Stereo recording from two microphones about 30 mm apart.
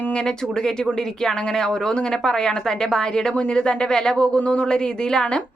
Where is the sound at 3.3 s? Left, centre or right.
Left.